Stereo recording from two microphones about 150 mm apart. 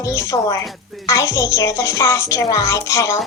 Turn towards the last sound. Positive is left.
turn(degrees=20)  # may be behind; listen again after turning